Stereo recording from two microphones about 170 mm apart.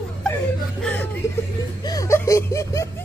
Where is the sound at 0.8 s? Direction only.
10° left (ahead or behind).